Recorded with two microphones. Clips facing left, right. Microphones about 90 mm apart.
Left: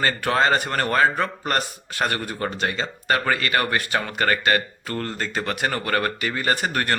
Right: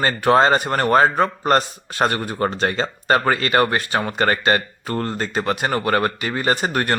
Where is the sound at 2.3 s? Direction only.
40° right (ahead or behind); by 6.9 s 20° right (ahead or behind).